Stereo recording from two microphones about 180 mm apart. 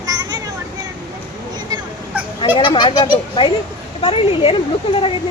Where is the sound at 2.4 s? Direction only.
25° left (ahead or behind).